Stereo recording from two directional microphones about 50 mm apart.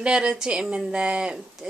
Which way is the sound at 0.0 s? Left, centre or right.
Right.